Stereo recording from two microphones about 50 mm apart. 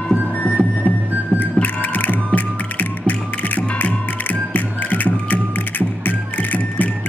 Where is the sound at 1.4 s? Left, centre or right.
Left.